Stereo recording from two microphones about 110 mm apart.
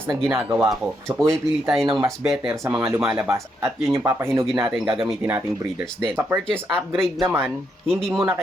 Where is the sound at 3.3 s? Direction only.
25° right (ahead or behind).